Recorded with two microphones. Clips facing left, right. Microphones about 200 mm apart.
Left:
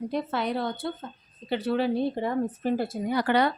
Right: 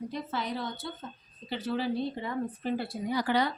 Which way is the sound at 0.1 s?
65° left (ahead or behind).